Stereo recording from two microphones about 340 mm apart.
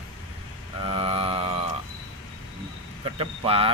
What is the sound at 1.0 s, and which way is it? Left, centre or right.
Speech, centre.